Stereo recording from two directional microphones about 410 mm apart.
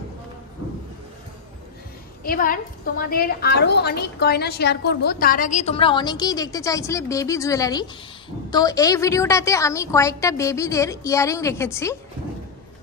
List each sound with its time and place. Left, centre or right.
2.2 s a woman's voice: left